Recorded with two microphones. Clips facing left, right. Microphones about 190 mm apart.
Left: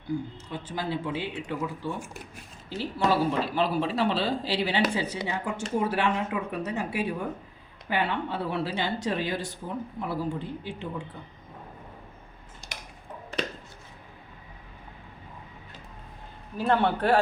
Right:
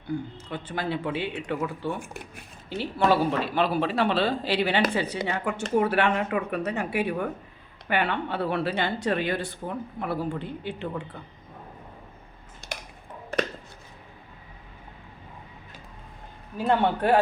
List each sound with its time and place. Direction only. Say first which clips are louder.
0.3 s speech: right 2 dB; 60° right (ahead or behind)
12.6 s tick-tock: right 7 dB; 60° right (ahead or behind)
16.6 s a man's voice: right 1 dB; 15° right (ahead or behind)